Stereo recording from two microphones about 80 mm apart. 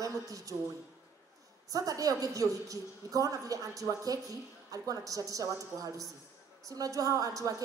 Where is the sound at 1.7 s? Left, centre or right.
Right.